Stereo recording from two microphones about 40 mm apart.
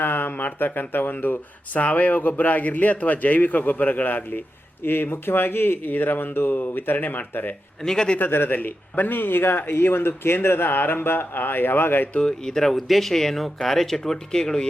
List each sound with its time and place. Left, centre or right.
0.0 s a man's voice: left
7.8 s speech: centre
8.3 s speech: left
8.5 s a man's voice: left
12.2 s speech: centre